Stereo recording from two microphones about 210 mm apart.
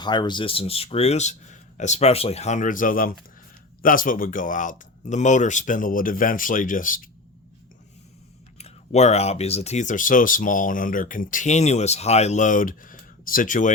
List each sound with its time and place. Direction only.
0.0 s speech: 20° left (ahead or behind); by 7.1 s 40° left (ahead or behind)
8.5 s speech: 30° left (ahead or behind)